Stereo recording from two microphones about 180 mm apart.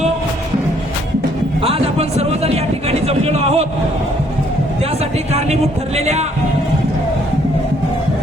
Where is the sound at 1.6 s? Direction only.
35° right (ahead or behind).